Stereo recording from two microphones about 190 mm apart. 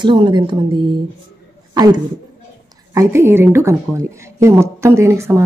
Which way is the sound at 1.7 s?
20° right (ahead or behind).